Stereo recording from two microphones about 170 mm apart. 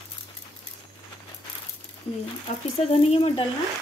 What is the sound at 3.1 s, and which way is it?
Speech, 35° left (ahead or behind).